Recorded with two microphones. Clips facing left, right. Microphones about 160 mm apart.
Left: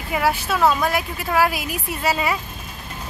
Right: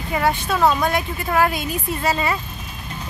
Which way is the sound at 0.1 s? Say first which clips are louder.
Even; 5° left (ahead or behind).